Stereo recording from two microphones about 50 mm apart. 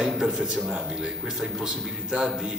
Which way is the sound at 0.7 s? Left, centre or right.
Centre.